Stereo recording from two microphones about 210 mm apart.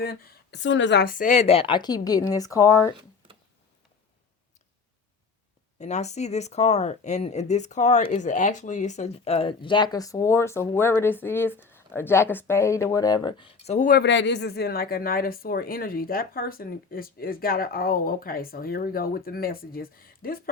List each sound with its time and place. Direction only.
0.0 s speech: 45° left (ahead or behind); by 2.9 s 15° left (ahead or behind)
5.8 s speech: 35° left (ahead or behind)
14.0 s speech: 60° left (ahead or behind)